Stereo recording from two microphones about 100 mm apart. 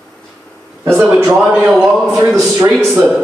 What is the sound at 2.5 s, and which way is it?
Speech, 30° right (ahead or behind).